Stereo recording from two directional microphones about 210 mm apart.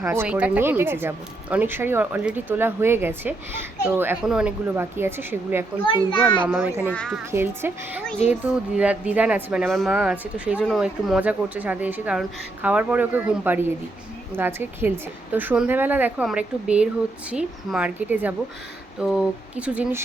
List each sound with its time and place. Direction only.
0.0 s speech: 10° right (ahead or behind)
5.8 s a child's voice: 25° left (ahead or behind)
6.4 s speech: 10° right (ahead or behind)